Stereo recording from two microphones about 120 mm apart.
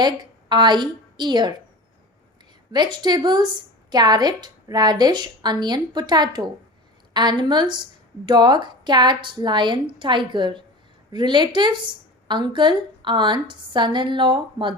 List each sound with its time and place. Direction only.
0.0 s a woman's voice: 35° right (ahead or behind)
2.7 s a woman's voice: 35° right (ahead or behind)